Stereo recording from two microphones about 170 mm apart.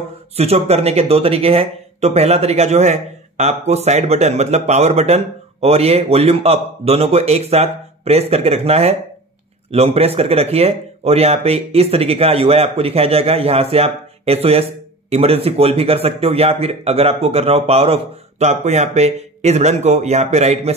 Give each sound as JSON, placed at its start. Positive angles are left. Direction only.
{"t": 0.4, "sound": "speech", "side_deg": -40}